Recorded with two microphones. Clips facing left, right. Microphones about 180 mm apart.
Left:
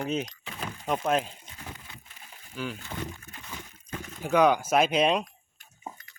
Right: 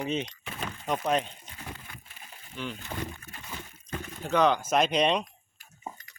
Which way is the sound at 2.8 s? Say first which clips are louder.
Even; 15° right (ahead or behind).